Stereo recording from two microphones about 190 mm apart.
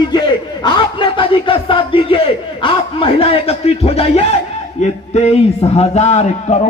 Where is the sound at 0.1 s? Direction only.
25° left (ahead or behind).